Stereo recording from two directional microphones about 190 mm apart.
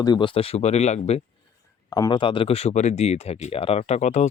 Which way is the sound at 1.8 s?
20° left (ahead or behind).